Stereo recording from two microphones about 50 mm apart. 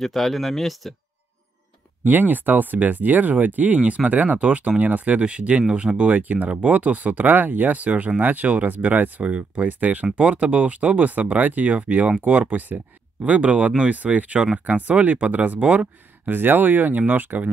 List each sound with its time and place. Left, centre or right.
0.0 s speech: centre
2.0 s speech: right
16.3 s speech: right